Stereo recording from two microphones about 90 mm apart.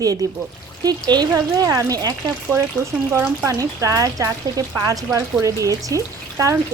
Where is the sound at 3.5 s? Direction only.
40° right (ahead or behind).